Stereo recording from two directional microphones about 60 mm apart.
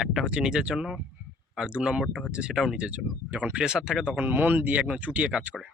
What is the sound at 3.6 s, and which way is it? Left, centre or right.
Speech, centre.